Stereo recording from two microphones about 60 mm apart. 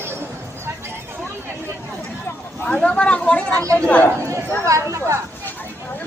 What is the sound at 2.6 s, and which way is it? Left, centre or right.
Chatter, centre.